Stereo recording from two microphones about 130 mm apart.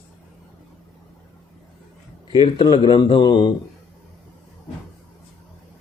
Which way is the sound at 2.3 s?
40° left (ahead or behind).